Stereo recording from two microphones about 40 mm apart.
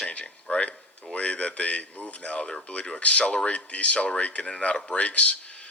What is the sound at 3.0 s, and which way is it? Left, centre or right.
Speech, left.